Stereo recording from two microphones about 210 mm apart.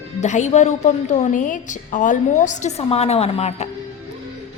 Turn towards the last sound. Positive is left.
turn(degrees=30)  # may be behind; listen again after turning